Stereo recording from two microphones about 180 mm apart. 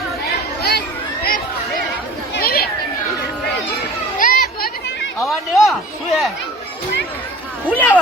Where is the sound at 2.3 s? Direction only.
55° left (ahead or behind).